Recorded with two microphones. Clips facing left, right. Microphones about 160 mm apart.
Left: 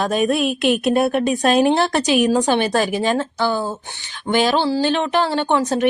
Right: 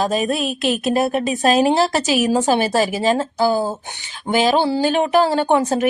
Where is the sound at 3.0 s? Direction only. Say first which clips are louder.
Right 2 dB; 35° right (ahead or behind).